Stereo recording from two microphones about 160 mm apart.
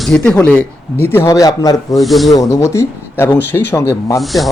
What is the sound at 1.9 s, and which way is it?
Speech, centre (ahead or behind).